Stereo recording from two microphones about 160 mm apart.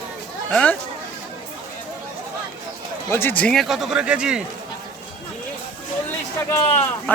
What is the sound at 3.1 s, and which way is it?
Speech, 15° left (ahead or behind).